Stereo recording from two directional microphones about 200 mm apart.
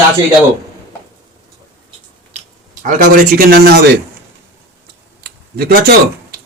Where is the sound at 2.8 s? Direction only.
40° right (ahead or behind).